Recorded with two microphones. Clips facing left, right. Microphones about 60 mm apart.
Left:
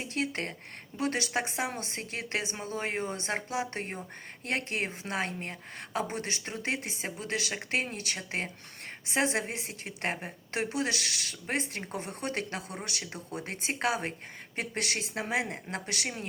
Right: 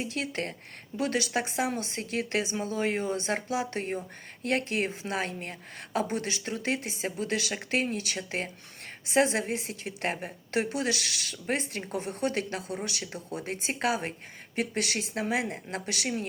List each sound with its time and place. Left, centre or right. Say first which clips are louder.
0.0 s a woman's voice: right 1 dB; left
11.9 s a woman's voice: right 5 dB; left